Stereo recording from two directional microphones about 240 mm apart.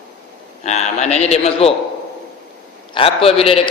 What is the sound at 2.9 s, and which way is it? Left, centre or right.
Speech, left.